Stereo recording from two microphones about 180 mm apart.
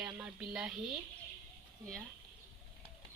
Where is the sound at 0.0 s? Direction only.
5° right (ahead or behind).